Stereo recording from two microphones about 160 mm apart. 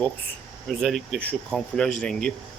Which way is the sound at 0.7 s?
Centre (ahead or behind).